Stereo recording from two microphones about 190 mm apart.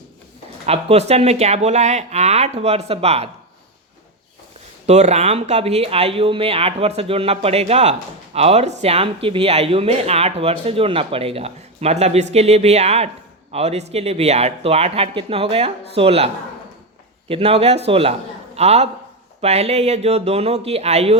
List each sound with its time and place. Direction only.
0.6 s speech: 35° right (ahead or behind)
4.9 s a man's voice: 35° right (ahead or behind)